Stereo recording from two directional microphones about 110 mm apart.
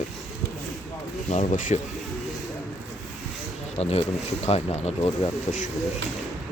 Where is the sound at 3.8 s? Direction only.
70° left (ahead or behind).